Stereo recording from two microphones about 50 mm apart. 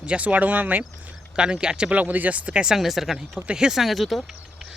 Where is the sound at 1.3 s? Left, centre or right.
Centre.